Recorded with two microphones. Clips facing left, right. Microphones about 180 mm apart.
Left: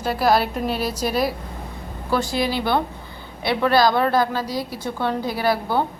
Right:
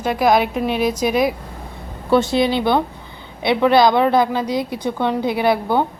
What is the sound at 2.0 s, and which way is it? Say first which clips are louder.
A woman's voice: right 6 dB; 25° right (ahead or behind).